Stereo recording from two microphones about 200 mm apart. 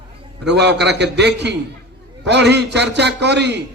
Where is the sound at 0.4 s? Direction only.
60° right (ahead or behind).